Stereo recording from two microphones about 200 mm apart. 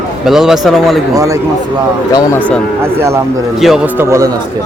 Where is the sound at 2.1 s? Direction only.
15° left (ahead or behind).